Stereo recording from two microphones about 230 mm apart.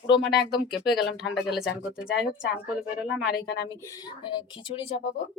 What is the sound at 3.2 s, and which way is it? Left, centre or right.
Speech, left.